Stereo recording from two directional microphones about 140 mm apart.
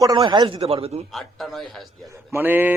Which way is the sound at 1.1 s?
Centre (ahead or behind).